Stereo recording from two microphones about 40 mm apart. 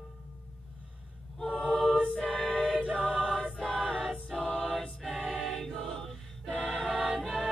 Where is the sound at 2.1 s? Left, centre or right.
Left.